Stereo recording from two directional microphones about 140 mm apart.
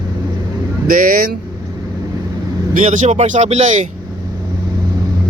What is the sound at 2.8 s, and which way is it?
Speech, 60° right (ahead or behind).